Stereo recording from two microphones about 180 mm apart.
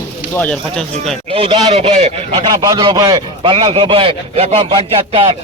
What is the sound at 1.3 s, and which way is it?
Speech, 30° right (ahead or behind).